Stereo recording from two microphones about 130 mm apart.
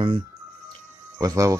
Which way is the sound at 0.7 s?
25° right (ahead or behind).